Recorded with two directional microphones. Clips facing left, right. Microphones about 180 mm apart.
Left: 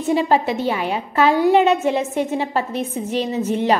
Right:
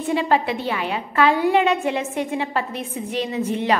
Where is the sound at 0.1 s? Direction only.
40° left (ahead or behind).